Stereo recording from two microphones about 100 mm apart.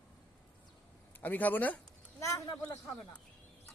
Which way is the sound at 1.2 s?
15° left (ahead or behind).